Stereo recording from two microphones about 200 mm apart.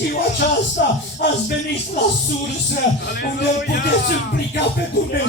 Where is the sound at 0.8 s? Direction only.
50° left (ahead or behind).